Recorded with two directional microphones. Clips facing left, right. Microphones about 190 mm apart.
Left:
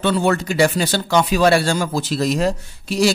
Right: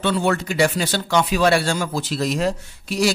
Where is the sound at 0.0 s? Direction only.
40° left (ahead or behind).